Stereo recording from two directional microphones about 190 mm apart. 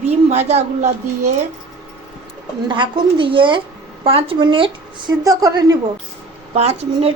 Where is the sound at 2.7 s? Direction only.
25° right (ahead or behind).